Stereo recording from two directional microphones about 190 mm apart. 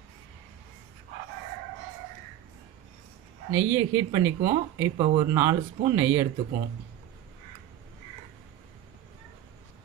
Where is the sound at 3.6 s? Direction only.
15° right (ahead or behind).